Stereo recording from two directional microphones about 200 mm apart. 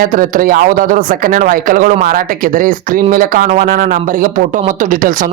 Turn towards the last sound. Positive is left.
turn(degrees=-45)  # may be behind; listen again after turning